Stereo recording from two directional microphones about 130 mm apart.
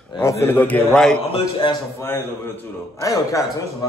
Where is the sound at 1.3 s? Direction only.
40° left (ahead or behind).